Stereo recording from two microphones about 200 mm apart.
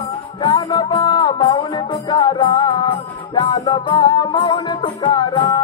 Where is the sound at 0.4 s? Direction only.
20° left (ahead or behind).